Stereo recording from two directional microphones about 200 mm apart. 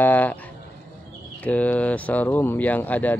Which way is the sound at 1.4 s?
10° left (ahead or behind).